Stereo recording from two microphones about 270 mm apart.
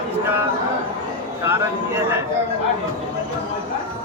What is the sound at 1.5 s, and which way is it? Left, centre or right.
Speech, centre.